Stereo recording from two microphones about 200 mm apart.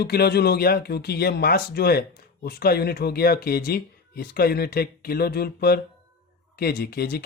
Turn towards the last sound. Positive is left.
turn(degrees=50)  # may be behind; listen again after turning